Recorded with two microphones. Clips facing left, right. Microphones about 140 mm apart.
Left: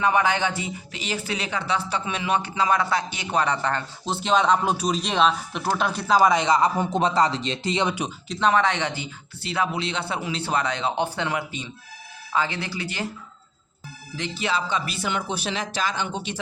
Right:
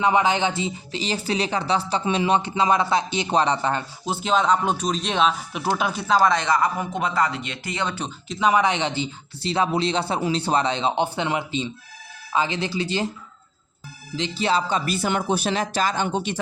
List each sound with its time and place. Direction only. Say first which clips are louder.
0.0 s speech: right 2 dB; 20° right (ahead or behind)
4.1 s speech: even; centre (ahead or behind); by 8.1 s 15° left (ahead or behind)
8.3 s speech: right 1 dB; 10° right (ahead or behind); by 13.1 s 25° right (ahead or behind)
14.2 s speech: right 4 dB; 30° right (ahead or behind)